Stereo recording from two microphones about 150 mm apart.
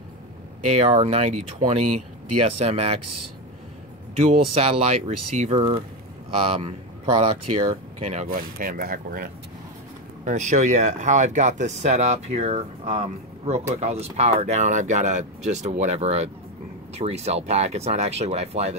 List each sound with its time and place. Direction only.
0.7 s speech: 45° right (ahead or behind)
4.1 s speech: 45° right (ahead or behind)
8.3 s speech: 70° right (ahead or behind)
10.2 s speech: 55° right (ahead or behind)